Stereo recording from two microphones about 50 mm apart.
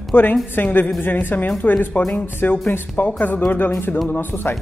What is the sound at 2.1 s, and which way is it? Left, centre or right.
A woman's voice, left.